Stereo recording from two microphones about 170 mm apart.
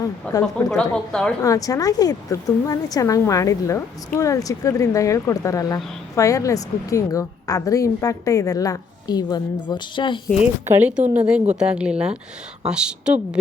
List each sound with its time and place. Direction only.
0.0 s a woman's voice: 20° left (ahead or behind)
0.9 s speech: 5° left (ahead or behind)
1.4 s a woman's voice: 20° left (ahead or behind)
10.2 s speech: 5° right (ahead or behind)